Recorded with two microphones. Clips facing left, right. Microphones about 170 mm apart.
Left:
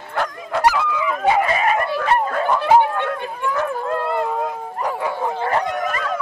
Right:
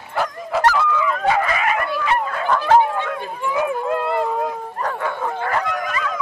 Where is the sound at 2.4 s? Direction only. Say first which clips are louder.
Right 1 dB; 15° left (ahead or behind).